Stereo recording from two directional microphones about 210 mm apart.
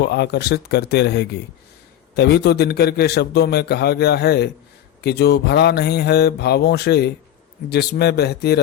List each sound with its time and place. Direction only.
0.0 s a man's voice: 50° left (ahead or behind)